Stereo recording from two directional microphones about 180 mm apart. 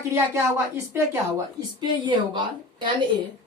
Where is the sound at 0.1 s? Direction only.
15° right (ahead or behind).